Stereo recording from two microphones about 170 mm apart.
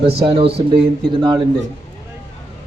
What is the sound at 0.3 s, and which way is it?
A man's voice, 35° right (ahead or behind).